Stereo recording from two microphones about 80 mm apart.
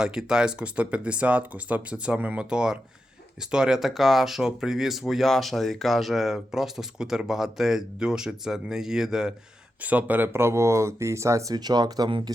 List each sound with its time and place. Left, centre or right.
0.0 s speech: centre
9.8 s speech: right
11.5 s speech: right
12.0 s speech: right